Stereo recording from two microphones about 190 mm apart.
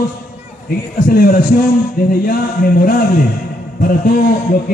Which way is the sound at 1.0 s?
50° left (ahead or behind).